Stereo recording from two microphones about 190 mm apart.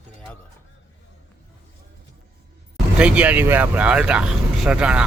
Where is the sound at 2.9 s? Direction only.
5° right (ahead or behind).